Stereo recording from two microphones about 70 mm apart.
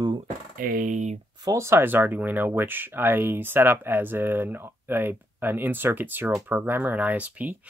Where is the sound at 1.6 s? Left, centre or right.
Right.